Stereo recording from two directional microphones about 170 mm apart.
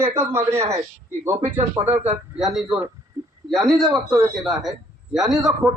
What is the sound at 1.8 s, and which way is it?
Speech, 25° right (ahead or behind).